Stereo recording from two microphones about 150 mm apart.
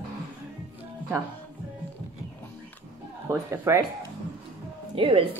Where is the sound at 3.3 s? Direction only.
20° right (ahead or behind).